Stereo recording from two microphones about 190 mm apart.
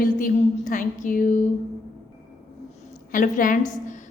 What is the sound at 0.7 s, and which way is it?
Speech, 45° left (ahead or behind).